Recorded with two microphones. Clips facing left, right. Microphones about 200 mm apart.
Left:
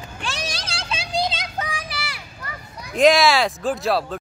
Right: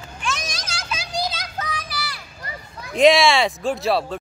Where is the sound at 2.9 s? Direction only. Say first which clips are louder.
Right 1 dB; centre (ahead or behind).